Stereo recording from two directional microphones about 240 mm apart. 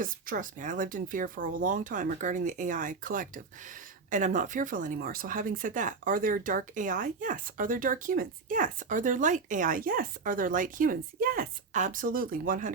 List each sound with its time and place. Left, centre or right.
0.0 s speech: right